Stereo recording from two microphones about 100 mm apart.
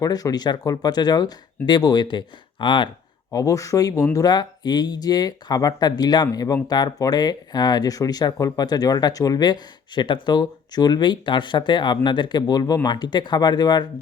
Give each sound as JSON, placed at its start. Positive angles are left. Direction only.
{"t": 0.0, "sound": "speech", "side_deg": 40}
{"t": 3.3, "sound": "speech", "side_deg": 35}